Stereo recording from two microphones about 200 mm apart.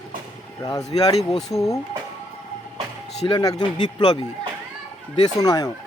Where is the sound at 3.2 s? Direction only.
25° left (ahead or behind).